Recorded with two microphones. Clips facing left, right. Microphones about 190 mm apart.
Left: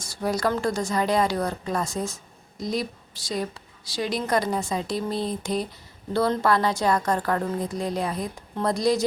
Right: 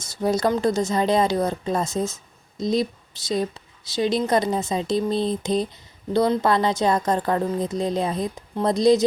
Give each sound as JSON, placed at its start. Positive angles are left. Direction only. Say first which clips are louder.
{"t": 0.0, "sound": "speech", "louder": "right 4 dB", "side_deg": -20}